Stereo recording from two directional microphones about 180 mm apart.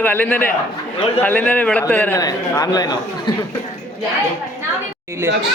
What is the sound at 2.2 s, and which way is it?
Speech, 20° left (ahead or behind).